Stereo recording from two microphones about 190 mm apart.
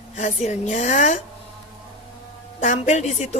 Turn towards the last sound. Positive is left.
turn(degrees=35)  # may be behind; listen again after turning